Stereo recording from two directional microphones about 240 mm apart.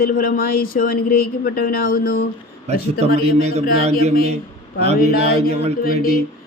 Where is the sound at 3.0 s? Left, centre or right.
Right.